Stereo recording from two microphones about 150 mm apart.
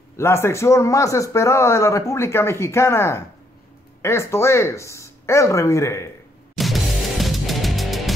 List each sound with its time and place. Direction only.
0.2 s a man's voice: 15° left (ahead or behind)
6.5 s music: centre (ahead or behind)